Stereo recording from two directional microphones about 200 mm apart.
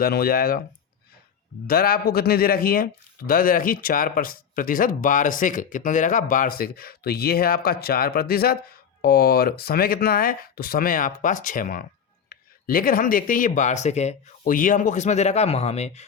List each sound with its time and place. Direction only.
0.0 s speech: 50° left (ahead or behind)
1.6 s speech: 50° left (ahead or behind); by 16.0 s 35° left (ahead or behind)